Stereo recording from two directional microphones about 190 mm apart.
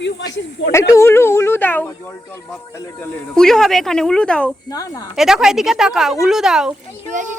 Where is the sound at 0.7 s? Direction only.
15° left (ahead or behind).